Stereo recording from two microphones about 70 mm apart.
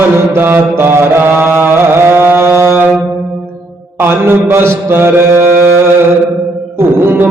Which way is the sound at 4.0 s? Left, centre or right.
Right.